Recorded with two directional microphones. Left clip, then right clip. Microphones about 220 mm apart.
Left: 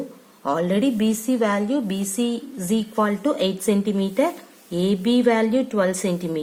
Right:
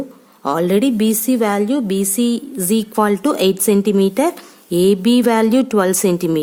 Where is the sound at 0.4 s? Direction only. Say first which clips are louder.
Right 6 dB; 45° right (ahead or behind).